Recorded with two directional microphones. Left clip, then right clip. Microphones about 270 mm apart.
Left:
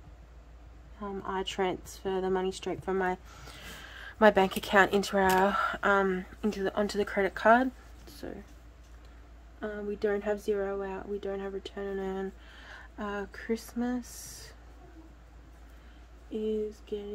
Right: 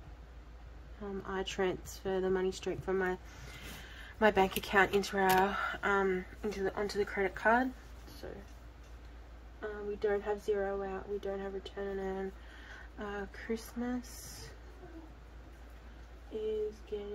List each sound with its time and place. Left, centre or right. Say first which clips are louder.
1.0 s speech: left 4 dB; centre
9.6 s speech: left 4 dB; left